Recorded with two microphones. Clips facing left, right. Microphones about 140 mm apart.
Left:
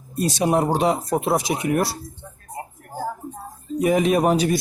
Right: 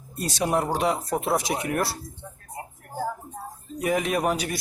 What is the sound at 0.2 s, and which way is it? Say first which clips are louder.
Speech: left 5 dB; 20° left (ahead or behind).